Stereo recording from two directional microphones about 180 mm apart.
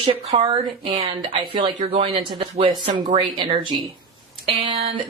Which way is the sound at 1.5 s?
30° right (ahead or behind).